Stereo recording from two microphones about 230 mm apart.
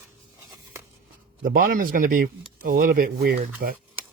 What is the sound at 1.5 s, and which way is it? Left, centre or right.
Speech, right.